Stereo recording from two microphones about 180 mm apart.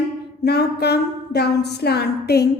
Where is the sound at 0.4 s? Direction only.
65° left (ahead or behind).